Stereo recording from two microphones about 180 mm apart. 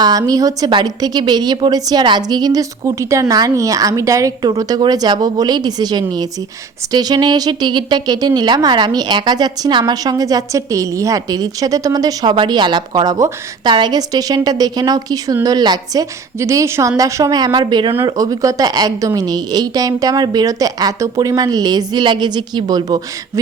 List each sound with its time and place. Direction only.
0.0 s a woman's voice: 20° right (ahead or behind)